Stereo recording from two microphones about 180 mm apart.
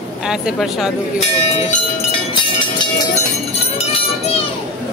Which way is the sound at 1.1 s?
35° left (ahead or behind).